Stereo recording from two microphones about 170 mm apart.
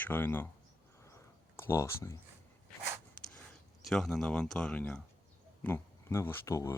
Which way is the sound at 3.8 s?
Centre (ahead or behind).